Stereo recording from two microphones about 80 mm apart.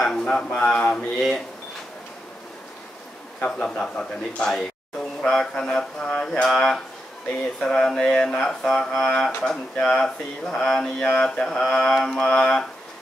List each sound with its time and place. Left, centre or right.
0.0 s speech: centre
3.3 s a man's voice: centre